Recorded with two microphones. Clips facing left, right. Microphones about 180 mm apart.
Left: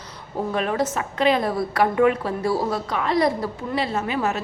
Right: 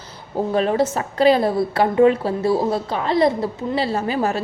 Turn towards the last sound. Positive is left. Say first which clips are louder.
# right 3 dB
turn(degrees=-35)  # may be behind; listen again after turning